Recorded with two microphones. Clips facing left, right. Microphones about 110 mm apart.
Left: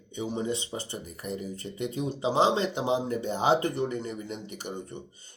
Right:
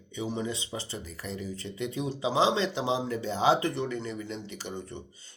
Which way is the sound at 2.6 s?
55° left (ahead or behind).